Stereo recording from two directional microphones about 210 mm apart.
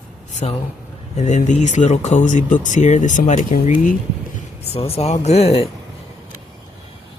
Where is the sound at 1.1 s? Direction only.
35° left (ahead or behind).